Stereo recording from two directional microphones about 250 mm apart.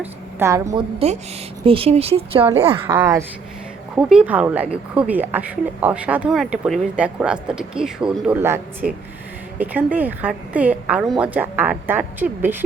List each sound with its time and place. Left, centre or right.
0.0 s a woman's voice: centre
2.8 s a woman's voice: centre